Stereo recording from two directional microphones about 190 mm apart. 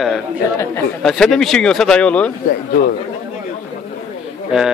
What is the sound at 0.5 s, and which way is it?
Speech, 15° left (ahead or behind).